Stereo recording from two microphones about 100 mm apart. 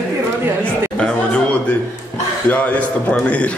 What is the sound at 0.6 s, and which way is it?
Speech, 10° left (ahead or behind).